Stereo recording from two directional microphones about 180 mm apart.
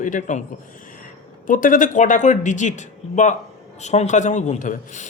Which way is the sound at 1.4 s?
50° left (ahead or behind).